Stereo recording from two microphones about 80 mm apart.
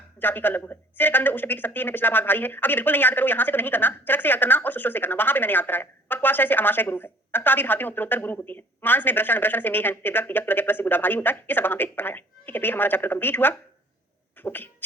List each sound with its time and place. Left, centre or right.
0.2 s speech: left